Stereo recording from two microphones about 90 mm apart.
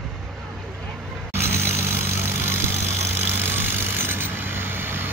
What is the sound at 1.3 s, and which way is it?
Vehicle, 25° right (ahead or behind).